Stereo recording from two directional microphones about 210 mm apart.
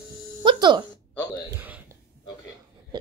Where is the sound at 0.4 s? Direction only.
20° right (ahead or behind).